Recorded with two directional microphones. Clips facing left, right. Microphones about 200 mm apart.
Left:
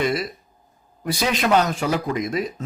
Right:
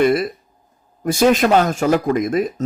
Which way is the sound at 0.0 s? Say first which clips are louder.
Right 7 dB; 55° right (ahead or behind).